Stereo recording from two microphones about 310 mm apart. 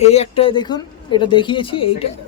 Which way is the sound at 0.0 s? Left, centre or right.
Centre.